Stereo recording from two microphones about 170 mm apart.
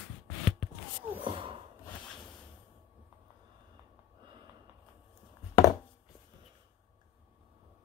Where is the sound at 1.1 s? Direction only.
30° right (ahead or behind).